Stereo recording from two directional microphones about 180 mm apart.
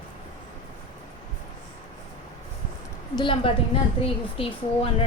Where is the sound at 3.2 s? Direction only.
30° left (ahead or behind).